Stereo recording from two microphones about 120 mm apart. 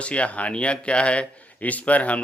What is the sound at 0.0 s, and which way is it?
A man's voice, 10° left (ahead or behind).